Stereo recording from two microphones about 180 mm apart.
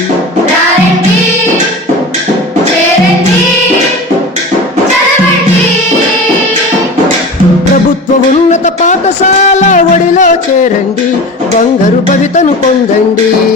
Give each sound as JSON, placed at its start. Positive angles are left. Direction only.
{"t": 8.4, "sound": "music", "side_deg": 40}